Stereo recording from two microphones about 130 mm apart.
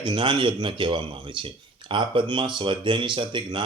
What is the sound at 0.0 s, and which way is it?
Speech, 35° right (ahead or behind).